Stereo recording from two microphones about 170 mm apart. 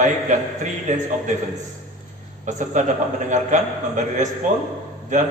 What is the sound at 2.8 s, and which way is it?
A man's voice, 45° right (ahead or behind).